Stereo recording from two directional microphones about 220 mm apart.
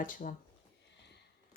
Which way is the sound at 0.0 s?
40° left (ahead or behind).